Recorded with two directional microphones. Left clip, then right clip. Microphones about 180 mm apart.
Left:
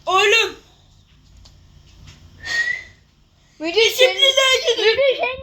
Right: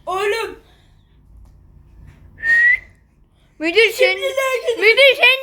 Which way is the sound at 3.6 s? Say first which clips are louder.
Right 3 dB; 65° right (ahead or behind).